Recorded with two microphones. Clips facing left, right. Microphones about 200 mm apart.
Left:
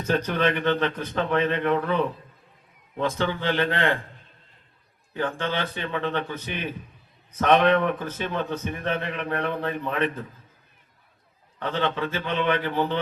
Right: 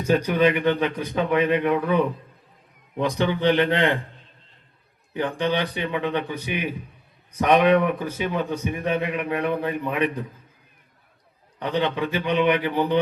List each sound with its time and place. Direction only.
0.0 s a man's voice: 10° right (ahead or behind)
5.1 s a man's voice: 15° right (ahead or behind)
11.6 s a man's voice: 15° right (ahead or behind)